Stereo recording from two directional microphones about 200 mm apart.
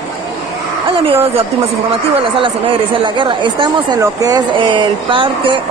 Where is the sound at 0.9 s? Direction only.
30° right (ahead or behind).